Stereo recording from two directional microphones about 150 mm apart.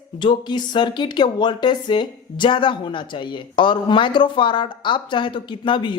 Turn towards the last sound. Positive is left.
turn(degrees=35)  # may be behind; listen again after turning